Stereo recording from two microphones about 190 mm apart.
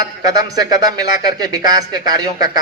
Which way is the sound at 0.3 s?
20° right (ahead or behind).